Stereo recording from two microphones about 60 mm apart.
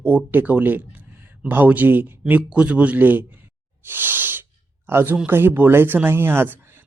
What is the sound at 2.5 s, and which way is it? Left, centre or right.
Speech, right.